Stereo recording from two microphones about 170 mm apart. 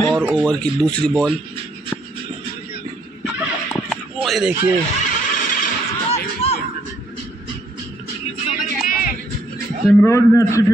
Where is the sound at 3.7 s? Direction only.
Centre (ahead or behind).